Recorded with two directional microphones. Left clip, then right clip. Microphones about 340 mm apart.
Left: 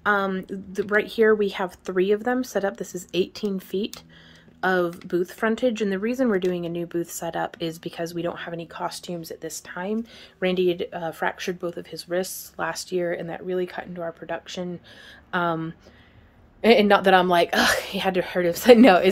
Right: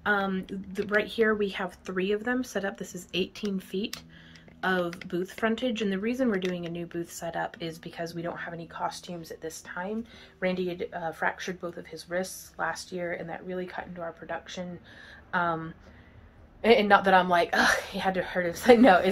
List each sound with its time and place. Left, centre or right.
0.0 s speech: centre; by 19.0 s left